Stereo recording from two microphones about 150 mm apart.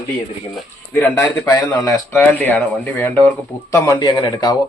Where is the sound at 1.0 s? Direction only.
15° left (ahead or behind).